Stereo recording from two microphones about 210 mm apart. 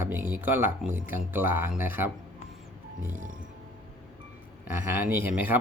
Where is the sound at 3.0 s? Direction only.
35° right (ahead or behind).